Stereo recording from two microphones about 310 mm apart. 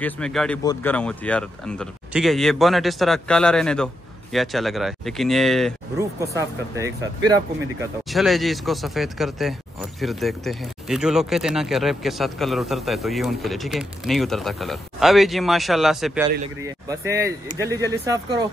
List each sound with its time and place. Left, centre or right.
0.0 s speech: centre
5.9 s speech: centre
8.1 s speech: centre
17.5 s speech: right
18.0 s speech: centre